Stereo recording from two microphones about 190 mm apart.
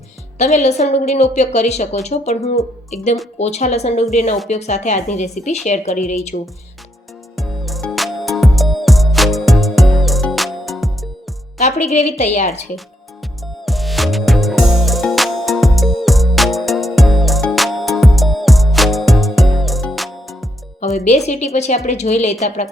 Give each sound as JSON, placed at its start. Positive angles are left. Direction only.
{"t": 0.3, "sound": "a woman's voice", "side_deg": 35}
{"t": 7.3, "sound": "music", "side_deg": 0}
{"t": 11.6, "sound": "a woman's voice", "side_deg": 35}
{"t": 13.4, "sound": "music", "side_deg": 0}
{"t": 20.8, "sound": "a woman's voice", "side_deg": 35}